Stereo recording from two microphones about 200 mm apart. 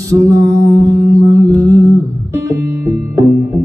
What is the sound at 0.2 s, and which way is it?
Music, 15° right (ahead or behind).